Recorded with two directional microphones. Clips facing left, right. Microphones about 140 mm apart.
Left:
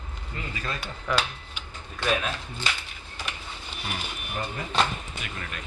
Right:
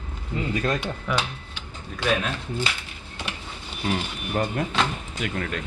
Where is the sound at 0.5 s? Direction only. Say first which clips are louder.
Right 10 dB; 75° right (ahead or behind).